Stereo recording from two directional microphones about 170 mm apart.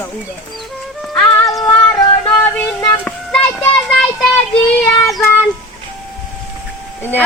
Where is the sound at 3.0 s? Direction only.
5° left (ahead or behind).